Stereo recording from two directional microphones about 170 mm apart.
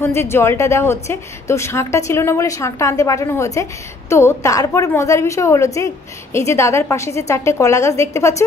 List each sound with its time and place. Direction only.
0.0 s a woman's voice: 15° left (ahead or behind)